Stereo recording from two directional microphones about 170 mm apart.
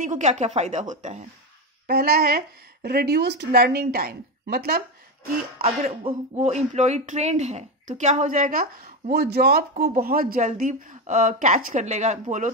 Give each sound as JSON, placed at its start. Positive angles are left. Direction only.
{"t": 0.0, "sound": "speech", "side_deg": -45}
{"t": 1.9, "sound": "speech", "side_deg": -65}
{"t": 6.0, "sound": "speech", "side_deg": -40}
{"t": 9.1, "sound": "speech", "side_deg": -65}